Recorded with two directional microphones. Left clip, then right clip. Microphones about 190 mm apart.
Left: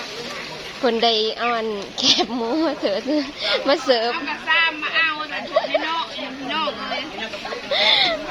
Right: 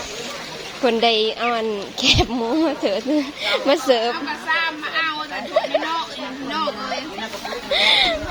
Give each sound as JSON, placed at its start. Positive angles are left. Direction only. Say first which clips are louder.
{"t": 0.8, "sound": "speech", "louder": "right 1 dB", "side_deg": -10}
{"t": 5.5, "sound": "a sound", "louder": "even", "side_deg": -15}
{"t": 6.5, "sound": "speech", "louder": "even", "side_deg": -10}